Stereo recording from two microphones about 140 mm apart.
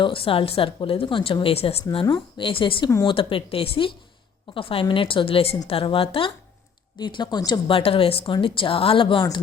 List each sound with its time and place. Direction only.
0.0 s a woman's voice: 40° left (ahead or behind)
7.7 s a woman's voice: 45° left (ahead or behind)